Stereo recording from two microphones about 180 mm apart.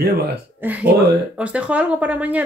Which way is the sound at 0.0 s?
60° right (ahead or behind).